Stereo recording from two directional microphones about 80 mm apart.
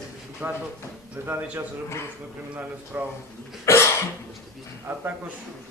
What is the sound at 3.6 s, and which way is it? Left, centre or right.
Cough, left.